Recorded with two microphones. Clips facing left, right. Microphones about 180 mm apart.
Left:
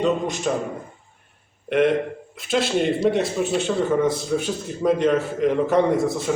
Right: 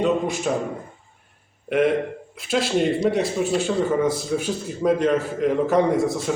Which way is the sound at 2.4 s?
Centre (ahead or behind).